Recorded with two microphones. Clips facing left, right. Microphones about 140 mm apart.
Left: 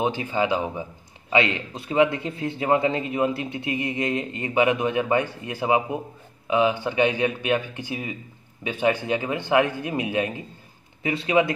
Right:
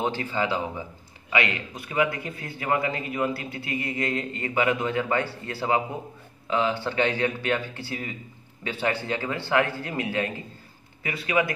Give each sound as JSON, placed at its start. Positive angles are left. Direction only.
{"t": 0.0, "sound": "a man's voice", "side_deg": 15}